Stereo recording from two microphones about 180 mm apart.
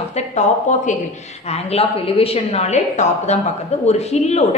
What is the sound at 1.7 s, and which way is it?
A woman's voice, 30° left (ahead or behind).